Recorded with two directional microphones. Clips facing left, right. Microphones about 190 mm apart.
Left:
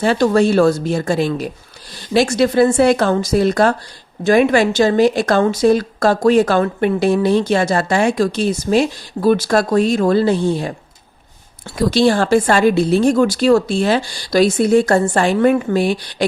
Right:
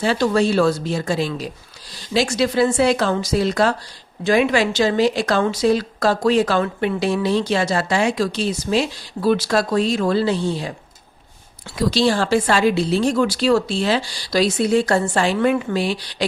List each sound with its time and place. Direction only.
0.0 s speech: 50° left (ahead or behind)
11.8 s speech: 55° left (ahead or behind)